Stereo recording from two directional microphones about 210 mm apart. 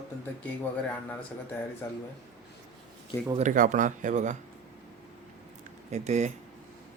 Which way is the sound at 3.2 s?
25° right (ahead or behind).